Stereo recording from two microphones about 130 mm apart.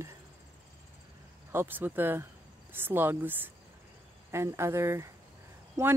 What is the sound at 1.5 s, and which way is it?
Speech, 15° right (ahead or behind).